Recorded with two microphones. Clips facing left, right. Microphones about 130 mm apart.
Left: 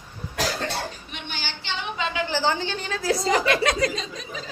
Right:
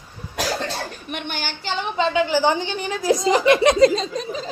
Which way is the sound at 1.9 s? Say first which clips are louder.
Right 8 dB; 30° right (ahead or behind).